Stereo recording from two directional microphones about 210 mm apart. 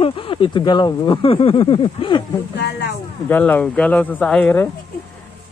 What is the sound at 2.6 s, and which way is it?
Speech, 55° left (ahead or behind).